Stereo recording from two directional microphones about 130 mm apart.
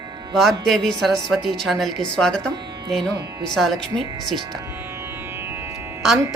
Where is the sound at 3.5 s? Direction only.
Centre (ahead or behind).